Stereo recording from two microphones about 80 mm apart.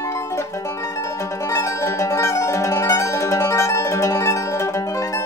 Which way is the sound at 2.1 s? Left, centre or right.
Left.